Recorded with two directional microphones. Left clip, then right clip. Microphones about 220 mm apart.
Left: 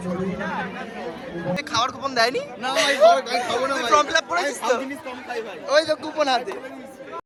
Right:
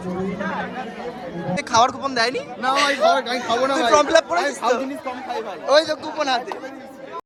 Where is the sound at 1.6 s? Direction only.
20° right (ahead or behind).